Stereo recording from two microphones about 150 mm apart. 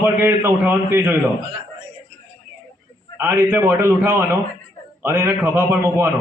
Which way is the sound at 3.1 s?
15° right (ahead or behind).